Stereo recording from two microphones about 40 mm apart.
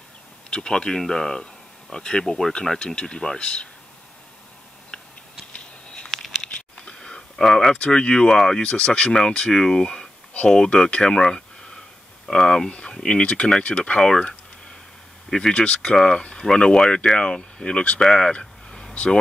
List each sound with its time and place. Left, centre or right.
0.5 s speech: centre
2.8 s speech: centre
6.0 s a sound: centre
6.4 s a sound: centre
7.8 s speech: left
10.9 s a sound: centre
12.3 s speech: centre
15.5 s speech: left
17.9 s vehicle: centre